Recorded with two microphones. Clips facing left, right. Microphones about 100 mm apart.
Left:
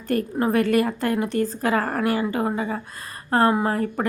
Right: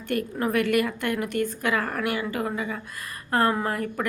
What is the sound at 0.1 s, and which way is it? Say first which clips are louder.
A woman's voice: left 4 dB; 30° left (ahead or behind).